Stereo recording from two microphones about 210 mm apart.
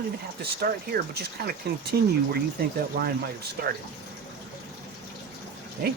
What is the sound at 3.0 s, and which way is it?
Speech, 50° right (ahead or behind).